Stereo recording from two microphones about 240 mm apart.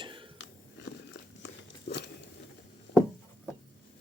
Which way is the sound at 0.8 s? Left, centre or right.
Left.